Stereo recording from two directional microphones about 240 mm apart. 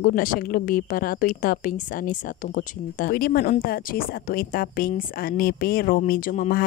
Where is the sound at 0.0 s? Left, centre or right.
Left.